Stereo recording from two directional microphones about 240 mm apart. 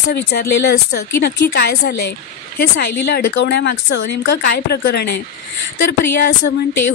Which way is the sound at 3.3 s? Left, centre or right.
Left.